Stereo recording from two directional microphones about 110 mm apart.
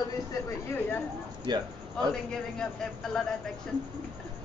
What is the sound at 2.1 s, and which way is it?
A man's voice, 5° left (ahead or behind).